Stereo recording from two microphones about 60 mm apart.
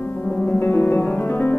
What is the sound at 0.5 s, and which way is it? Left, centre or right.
Music, left.